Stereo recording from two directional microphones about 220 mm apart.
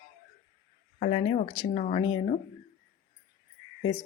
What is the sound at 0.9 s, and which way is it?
Speech, 30° left (ahead or behind).